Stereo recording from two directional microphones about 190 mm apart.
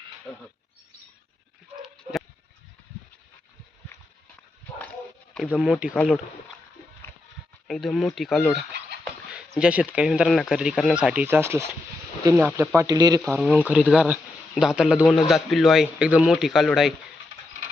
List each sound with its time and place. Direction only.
5.3 s radio: 5° left (ahead or behind)
7.7 s a man's voice: centre (ahead or behind); by 13.2 s 20° right (ahead or behind)
13.2 s a man's voice: centre (ahead or behind)